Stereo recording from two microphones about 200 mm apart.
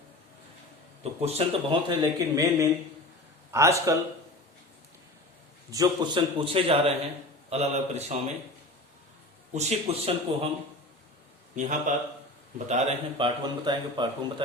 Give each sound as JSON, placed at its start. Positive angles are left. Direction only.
{"t": 1.2, "sound": "speech", "side_deg": -30}
{"t": 5.7, "sound": "speech", "side_deg": -20}
{"t": 9.5, "sound": "speech", "side_deg": -35}
{"t": 11.5, "sound": "speech", "side_deg": -40}